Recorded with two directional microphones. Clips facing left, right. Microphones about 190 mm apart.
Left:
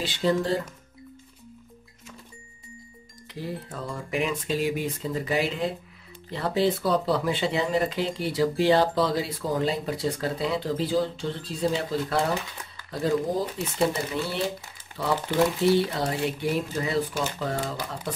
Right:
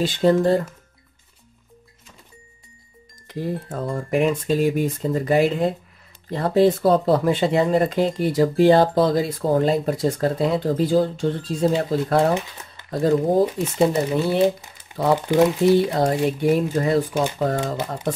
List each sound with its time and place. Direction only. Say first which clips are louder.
0.0 s speech: right 7 dB; 45° right (ahead or behind)
3.3 s speech: right 7 dB; 50° right (ahead or behind)
15.6 s speech: right 6 dB; 45° right (ahead or behind)